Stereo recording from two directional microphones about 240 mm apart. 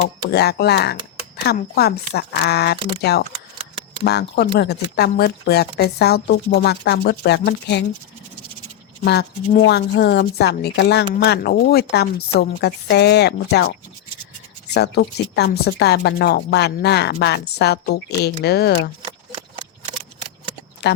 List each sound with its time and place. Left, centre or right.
0.0 s speech: left
9.0 s speech: left
14.7 s speech: left
19.0 s shuffling cards: right
20.8 s speech: left